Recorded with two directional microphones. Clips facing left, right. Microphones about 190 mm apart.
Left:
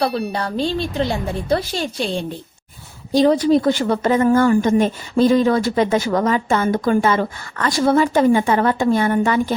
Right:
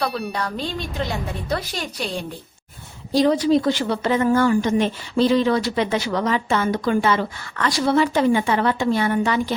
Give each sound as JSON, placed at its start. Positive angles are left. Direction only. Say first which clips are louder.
{"t": 0.3, "sound": "a woman's voice", "louder": "left 5 dB", "side_deg": 30}
{"t": 3.3, "sound": "speech", "louder": "left 3 dB", "side_deg": 50}